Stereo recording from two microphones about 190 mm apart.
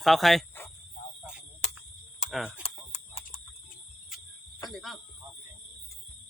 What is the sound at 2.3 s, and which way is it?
Speech, 5° right (ahead or behind).